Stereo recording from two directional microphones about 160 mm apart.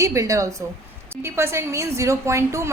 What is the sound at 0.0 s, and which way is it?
A woman's voice, 20° right (ahead or behind).